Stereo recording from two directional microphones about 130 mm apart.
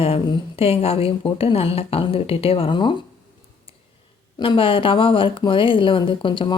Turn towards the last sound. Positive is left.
turn(degrees=40)  # may be behind; listen again after turning